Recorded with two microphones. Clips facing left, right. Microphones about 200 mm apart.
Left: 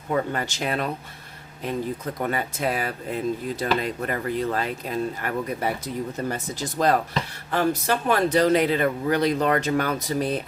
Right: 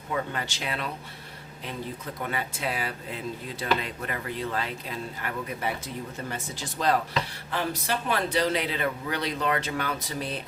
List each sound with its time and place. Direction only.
0.1 s speech: 45° left (ahead or behind)
2.2 s speech: 45° left (ahead or behind)